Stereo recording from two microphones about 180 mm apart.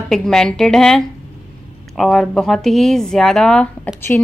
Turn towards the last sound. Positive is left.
turn(degrees=5)  # may be behind; listen again after turning